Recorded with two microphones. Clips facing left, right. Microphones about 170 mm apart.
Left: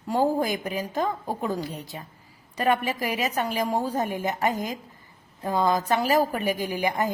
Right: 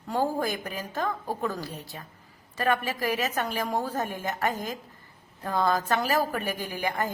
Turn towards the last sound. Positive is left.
turn(degrees=15)  # may be behind; listen again after turning